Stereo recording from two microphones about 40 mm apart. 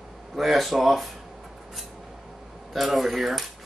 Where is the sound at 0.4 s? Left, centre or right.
Centre.